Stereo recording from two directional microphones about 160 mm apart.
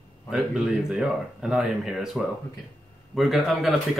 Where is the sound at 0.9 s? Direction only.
5° right (ahead or behind).